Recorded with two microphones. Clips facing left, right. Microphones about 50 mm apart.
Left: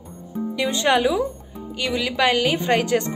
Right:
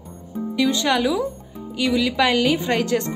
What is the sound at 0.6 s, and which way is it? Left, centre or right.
Speech, left.